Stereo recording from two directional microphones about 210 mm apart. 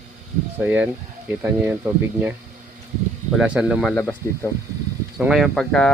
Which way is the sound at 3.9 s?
10° left (ahead or behind).